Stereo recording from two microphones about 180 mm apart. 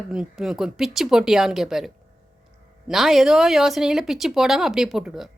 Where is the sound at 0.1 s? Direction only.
5° right (ahead or behind).